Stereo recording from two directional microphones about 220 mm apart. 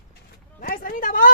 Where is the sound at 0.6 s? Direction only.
40° left (ahead or behind).